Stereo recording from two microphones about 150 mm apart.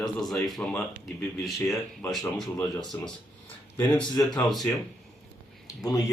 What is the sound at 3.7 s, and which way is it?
Speech, 5° left (ahead or behind).